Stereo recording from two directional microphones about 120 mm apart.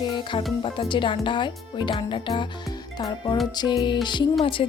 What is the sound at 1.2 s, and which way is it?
Music, 40° left (ahead or behind).